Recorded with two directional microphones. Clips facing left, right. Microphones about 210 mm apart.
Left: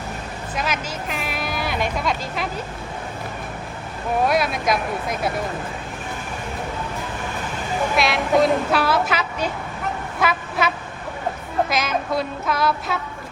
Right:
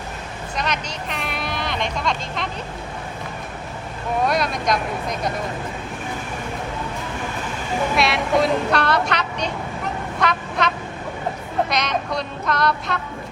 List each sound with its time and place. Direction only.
0.5 s speech: 5° left (ahead or behind)
4.3 s a woman's voice: 5° left (ahead or behind)
7.9 s a woman's voice: centre (ahead or behind)
10.2 s a sound: 5° left (ahead or behind)
11.7 s a woman's voice: 5° left (ahead or behind)